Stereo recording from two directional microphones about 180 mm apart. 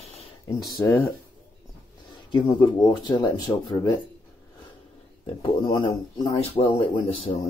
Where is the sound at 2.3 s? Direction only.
25° left (ahead or behind).